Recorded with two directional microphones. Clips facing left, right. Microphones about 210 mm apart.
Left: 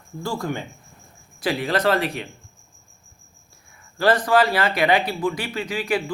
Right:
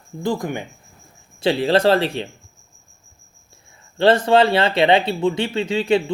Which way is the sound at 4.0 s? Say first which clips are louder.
Right 4 dB; 25° right (ahead or behind).